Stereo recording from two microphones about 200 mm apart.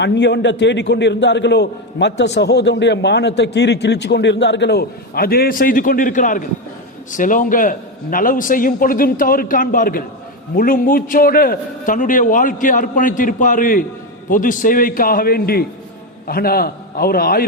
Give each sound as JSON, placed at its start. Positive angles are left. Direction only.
{"t": 0.0, "sound": "a man's voice", "side_deg": 60}